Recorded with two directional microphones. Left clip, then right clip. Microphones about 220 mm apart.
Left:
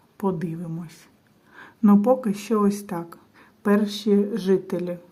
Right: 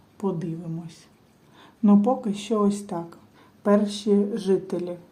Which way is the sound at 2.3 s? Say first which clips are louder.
Left 1 dB; 45° left (ahead or behind).